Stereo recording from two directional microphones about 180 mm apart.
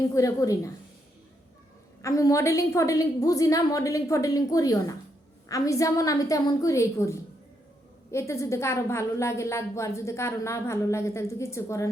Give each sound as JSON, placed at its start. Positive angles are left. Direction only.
{"t": 0.1, "sound": "a woman's voice", "side_deg": 20}
{"t": 2.0, "sound": "a woman's voice", "side_deg": 15}